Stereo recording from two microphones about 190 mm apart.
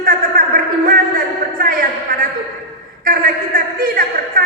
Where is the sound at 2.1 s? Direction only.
45° right (ahead or behind).